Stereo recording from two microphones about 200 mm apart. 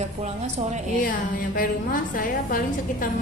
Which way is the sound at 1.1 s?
45° left (ahead or behind).